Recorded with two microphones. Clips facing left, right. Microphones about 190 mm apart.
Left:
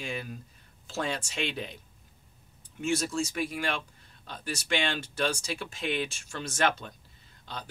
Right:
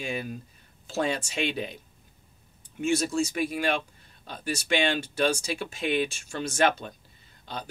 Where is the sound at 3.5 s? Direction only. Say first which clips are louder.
Right 5 dB; 20° right (ahead or behind).